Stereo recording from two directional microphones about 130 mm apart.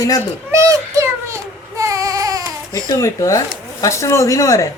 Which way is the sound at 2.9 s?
25° left (ahead or behind).